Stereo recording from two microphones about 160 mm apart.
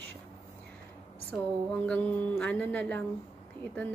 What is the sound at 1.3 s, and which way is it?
Mantra, 5° left (ahead or behind).